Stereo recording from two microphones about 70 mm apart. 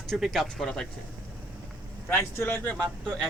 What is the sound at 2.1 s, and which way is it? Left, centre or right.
Speech, left.